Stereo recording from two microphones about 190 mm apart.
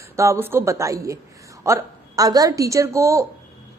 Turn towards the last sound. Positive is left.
turn(degrees=-15)  # may be behind; listen again after turning